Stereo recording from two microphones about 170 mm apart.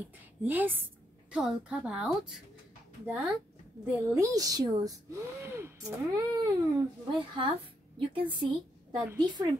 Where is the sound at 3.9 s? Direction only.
20° right (ahead or behind).